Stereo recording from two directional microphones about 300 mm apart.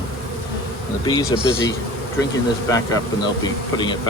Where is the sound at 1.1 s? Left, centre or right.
Centre.